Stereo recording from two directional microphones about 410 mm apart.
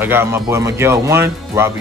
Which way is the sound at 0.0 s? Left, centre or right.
Centre.